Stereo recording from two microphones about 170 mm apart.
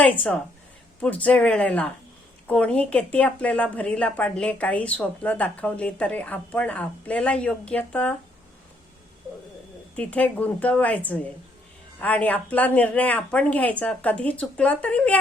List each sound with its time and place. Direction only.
0.0 s a woman's voice: 5° left (ahead or behind)
9.9 s a woman's voice: 5° left (ahead or behind)